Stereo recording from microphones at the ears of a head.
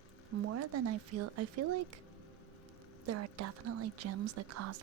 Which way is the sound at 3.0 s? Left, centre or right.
Right.